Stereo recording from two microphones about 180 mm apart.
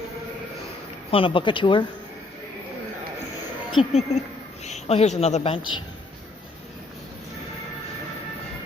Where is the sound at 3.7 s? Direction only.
30° left (ahead or behind).